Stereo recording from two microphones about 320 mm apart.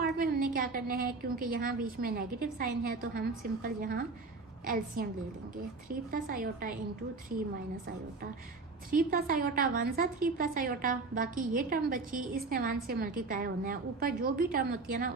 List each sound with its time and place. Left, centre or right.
0.0 s a woman's voice: right
8.9 s a woman's voice: right